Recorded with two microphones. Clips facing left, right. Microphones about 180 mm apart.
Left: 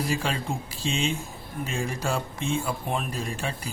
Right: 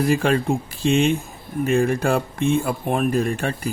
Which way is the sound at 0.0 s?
55° right (ahead or behind).